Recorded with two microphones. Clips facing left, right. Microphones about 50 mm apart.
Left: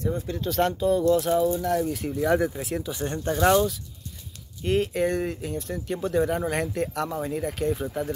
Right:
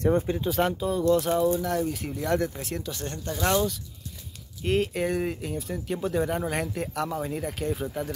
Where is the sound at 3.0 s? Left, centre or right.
Left.